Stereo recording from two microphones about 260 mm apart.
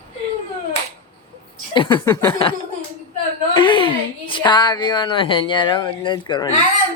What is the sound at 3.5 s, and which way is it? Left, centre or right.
A woman's voice, centre.